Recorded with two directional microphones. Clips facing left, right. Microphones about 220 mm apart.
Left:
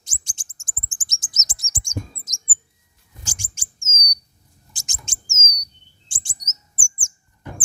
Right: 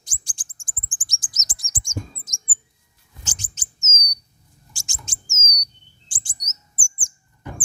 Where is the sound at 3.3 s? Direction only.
10° left (ahead or behind).